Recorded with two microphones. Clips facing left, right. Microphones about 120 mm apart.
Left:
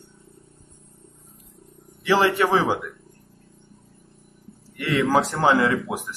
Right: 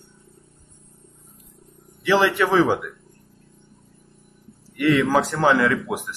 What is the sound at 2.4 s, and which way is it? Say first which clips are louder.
Speech: right 2 dB; 30° left (ahead or behind).